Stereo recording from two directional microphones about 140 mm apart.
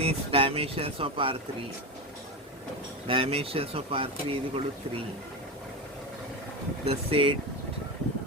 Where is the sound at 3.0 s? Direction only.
40° right (ahead or behind).